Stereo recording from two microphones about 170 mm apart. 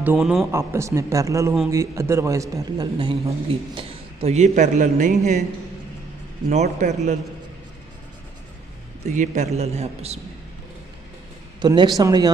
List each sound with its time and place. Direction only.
0.0 s speech: 5° right (ahead or behind)
0.5 s a man's voice: 15° right (ahead or behind); by 5.4 s 45° right (ahead or behind)
6.5 s speech: 40° right (ahead or behind)
9.0 s a man's voice: 45° right (ahead or behind)
11.6 s a man's voice: 25° right (ahead or behind)